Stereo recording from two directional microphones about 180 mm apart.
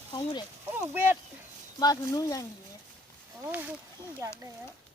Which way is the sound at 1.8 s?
20° left (ahead or behind).